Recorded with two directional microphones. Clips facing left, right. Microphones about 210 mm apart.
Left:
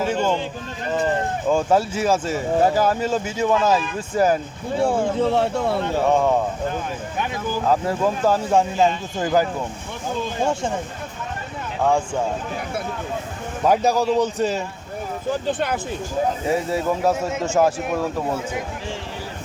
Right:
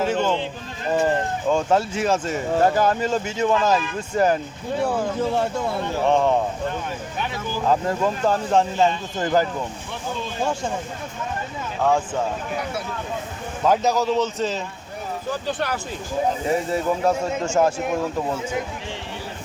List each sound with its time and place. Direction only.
0.0 s run: 10° left (ahead or behind)
1.5 s speech: 5° left (ahead or behind)
4.8 s speech: 30° left (ahead or behind)
5.2 s speech: 65° left (ahead or behind)
6.1 s speech: 10° left (ahead or behind)
7.7 s speech: 5° left (ahead or behind)
10.4 s speech: 25° left (ahead or behind)
13.7 s speech: 10° left (ahead or behind)
16.7 s speech: 5° left (ahead or behind)